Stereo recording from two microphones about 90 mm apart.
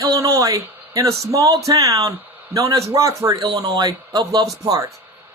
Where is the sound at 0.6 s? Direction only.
20° right (ahead or behind).